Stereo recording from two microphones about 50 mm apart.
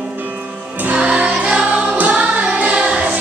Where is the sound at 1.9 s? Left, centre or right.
Right.